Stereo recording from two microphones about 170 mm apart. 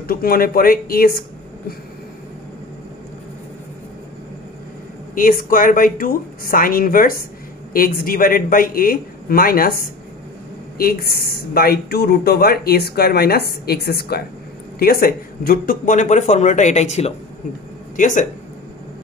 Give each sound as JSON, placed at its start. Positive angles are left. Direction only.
{"t": 0.1, "sound": "speech", "side_deg": 60}
{"t": 5.1, "sound": "speech", "side_deg": 55}
{"t": 10.8, "sound": "speech", "side_deg": 65}